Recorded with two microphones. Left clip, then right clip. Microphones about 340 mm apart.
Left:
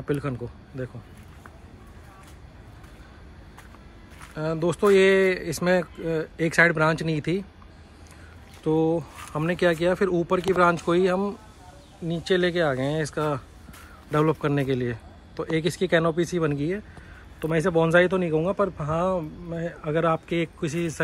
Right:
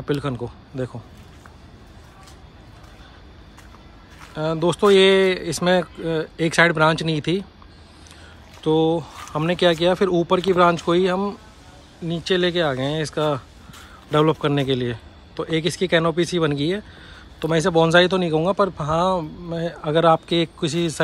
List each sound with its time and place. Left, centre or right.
0.0 s speech: centre
4.2 s speech: centre
8.6 s speech: centre